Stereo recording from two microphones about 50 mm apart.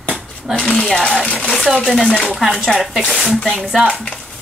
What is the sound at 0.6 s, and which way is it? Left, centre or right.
Speech, left.